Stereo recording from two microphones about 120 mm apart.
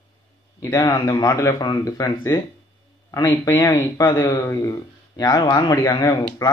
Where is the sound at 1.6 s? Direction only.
35° left (ahead or behind).